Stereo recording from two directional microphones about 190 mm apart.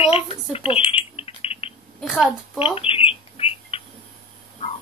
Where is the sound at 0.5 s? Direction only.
30° left (ahead or behind).